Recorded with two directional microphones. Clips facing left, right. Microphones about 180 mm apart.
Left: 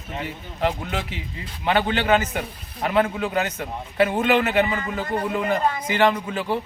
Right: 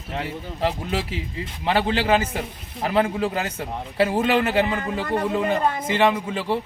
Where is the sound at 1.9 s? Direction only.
30° right (ahead or behind).